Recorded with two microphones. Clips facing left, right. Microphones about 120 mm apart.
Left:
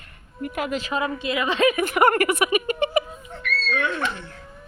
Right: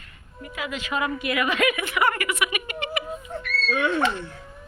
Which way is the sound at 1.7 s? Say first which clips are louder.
Left 6 dB; 45° left (ahead or behind).